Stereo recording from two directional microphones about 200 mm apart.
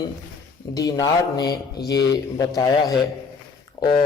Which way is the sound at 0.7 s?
15° left (ahead or behind).